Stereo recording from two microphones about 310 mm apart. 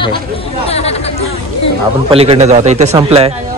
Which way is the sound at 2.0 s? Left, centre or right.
Centre.